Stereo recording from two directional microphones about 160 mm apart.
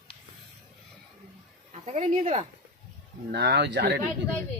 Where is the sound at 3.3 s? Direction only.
90° right.